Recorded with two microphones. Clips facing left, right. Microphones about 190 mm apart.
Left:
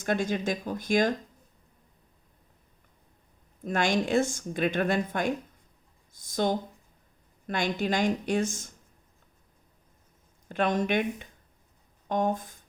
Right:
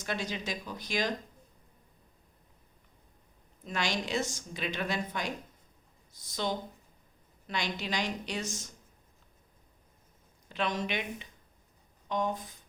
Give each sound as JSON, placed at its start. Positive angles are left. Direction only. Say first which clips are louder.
{"t": 0.0, "sound": "a woman's voice", "louder": "left 8 dB", "side_deg": 50}
{"t": 3.6, "sound": "a woman's voice", "louder": "left 7 dB", "side_deg": 50}
{"t": 10.5, "sound": "a woman's voice", "louder": "left 7 dB", "side_deg": 50}